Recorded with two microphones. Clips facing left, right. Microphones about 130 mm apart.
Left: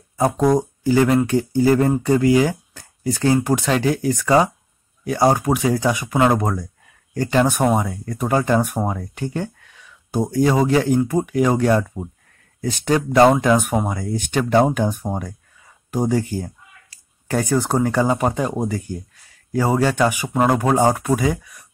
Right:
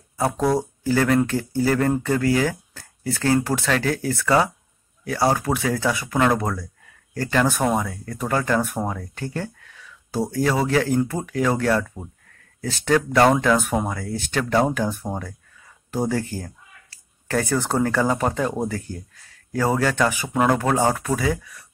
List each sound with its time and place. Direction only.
0.4 s speech: 15° left (ahead or behind)